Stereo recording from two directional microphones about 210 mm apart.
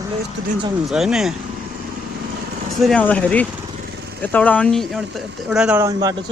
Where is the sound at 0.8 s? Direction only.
Centre (ahead or behind).